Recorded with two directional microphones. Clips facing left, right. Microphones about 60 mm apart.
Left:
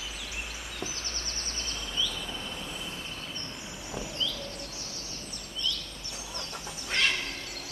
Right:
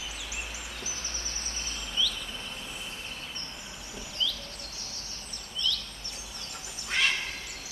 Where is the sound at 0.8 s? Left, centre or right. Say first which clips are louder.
Left 2 dB; centre.